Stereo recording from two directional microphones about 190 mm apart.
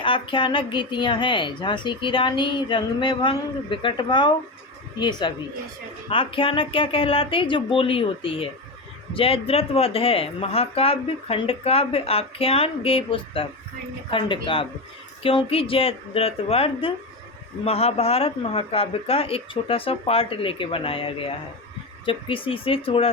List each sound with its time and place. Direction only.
0.0 s a woman's voice: 25° left (ahead or behind)